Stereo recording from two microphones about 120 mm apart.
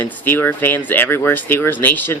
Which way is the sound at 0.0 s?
15° left (ahead or behind).